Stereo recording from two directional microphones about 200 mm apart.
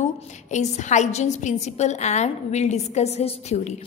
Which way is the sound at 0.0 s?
35° left (ahead or behind).